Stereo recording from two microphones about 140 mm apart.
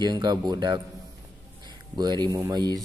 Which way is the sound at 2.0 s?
30° right (ahead or behind).